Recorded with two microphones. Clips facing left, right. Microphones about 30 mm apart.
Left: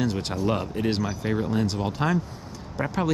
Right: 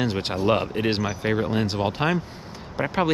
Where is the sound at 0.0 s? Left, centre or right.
Right.